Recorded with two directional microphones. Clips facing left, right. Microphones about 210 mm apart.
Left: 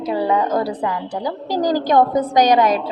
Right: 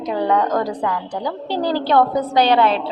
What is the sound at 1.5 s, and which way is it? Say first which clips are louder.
Speech: left 2 dB; 40° left (ahead or behind).